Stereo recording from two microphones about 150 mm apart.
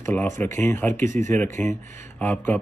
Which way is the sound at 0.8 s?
55° right (ahead or behind).